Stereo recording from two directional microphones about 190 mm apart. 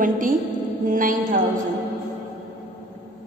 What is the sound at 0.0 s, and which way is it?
Music, 45° right (ahead or behind).